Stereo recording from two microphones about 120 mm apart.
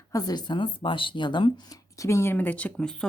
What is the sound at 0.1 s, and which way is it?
Speech, 35° left (ahead or behind).